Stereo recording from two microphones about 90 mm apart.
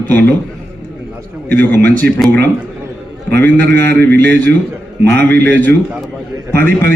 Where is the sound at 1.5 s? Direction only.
20° left (ahead or behind).